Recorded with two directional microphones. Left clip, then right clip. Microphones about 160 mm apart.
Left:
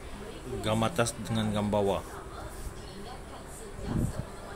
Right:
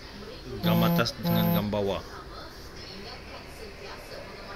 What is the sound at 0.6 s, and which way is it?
A man's voice, 15° left (ahead or behind).